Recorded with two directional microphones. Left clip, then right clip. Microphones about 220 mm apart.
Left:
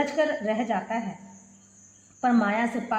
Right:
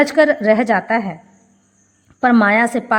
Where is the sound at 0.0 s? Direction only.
45° right (ahead or behind).